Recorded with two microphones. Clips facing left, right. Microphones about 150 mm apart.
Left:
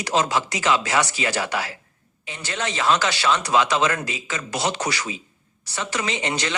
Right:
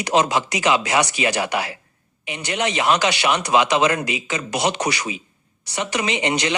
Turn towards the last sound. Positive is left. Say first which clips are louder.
# right 4 dB
turn(degrees=-15)  # may be behind; listen again after turning